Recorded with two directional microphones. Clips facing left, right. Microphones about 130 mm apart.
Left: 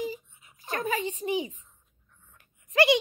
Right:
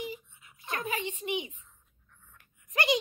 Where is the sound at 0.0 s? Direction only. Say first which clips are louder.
Left 5 dB; 35° left (ahead or behind).